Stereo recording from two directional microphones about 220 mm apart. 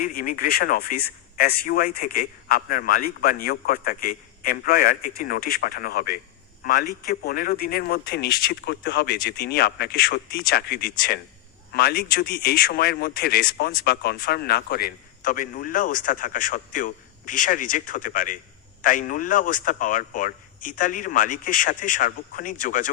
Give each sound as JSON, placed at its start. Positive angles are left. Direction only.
{"t": 0.0, "sound": "a man's voice", "side_deg": 40}